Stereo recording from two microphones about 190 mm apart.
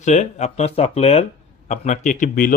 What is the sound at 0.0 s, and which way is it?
Speech, 40° left (ahead or behind).